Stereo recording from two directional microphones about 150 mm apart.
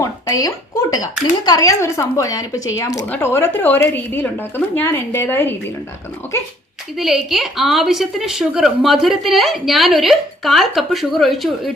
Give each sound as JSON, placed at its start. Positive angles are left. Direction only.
{"t": 0.0, "sound": "a sound", "side_deg": 25}
{"t": 1.5, "sound": "a woman's voice", "side_deg": 25}
{"t": 6.9, "sound": "a woman's voice", "side_deg": 0}